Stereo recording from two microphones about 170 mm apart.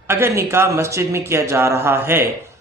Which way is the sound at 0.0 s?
15° right (ahead or behind).